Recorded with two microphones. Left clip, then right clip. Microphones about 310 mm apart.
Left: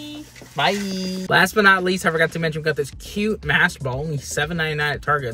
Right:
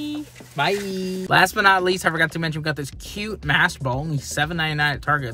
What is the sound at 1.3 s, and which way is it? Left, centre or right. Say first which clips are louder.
Speech: left 1 dB; centre.